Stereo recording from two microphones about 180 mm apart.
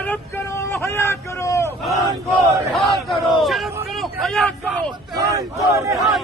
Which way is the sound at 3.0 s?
Centre (ahead or behind).